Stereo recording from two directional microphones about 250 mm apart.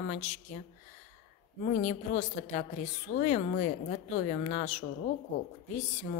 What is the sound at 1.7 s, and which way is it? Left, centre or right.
A woman's voice, left.